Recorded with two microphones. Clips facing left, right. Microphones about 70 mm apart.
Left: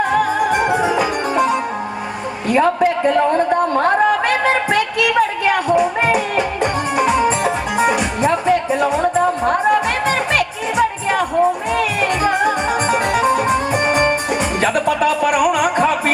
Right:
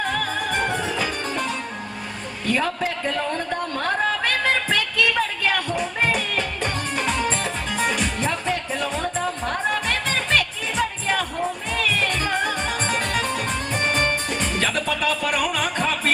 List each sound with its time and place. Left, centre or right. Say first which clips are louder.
0.0 s music: left 9 dB; centre
2.5 s a sound: left 9 dB; left
8.3 s music: left 10 dB; centre